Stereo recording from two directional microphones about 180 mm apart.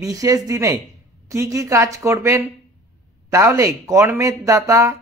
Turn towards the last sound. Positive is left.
turn(degrees=-15)  # may be behind; listen again after turning